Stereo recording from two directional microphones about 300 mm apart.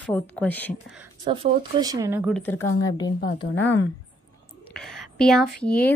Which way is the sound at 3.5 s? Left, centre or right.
Left.